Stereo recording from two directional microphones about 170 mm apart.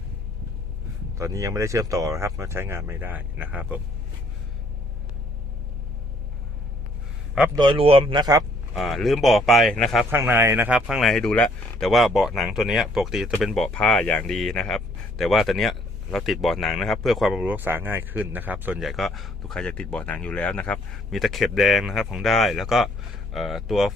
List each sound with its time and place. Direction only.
1.2 s speech: 20° right (ahead or behind)
7.5 s speech: 30° right (ahead or behind)
8.7 s speech: centre (ahead or behind)
10.1 s speech: 15° right (ahead or behind)